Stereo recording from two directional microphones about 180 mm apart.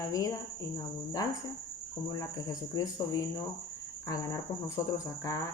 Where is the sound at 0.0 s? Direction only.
20° left (ahead or behind).